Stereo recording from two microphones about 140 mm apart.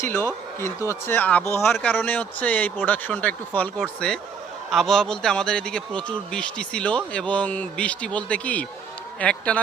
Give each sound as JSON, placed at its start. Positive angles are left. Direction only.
{"t": 0.1, "sound": "a man's voice", "side_deg": 15}